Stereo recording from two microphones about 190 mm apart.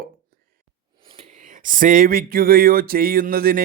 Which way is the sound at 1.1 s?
35° right (ahead or behind).